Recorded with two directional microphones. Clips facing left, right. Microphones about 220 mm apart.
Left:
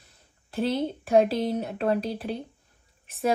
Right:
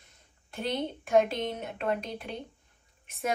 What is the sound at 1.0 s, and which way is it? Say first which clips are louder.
A woman's voice: left 4 dB; 35° left (ahead or behind).